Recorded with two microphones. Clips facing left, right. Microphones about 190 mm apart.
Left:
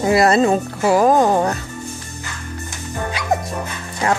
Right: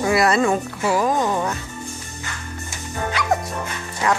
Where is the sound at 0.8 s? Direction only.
50° left (ahead or behind).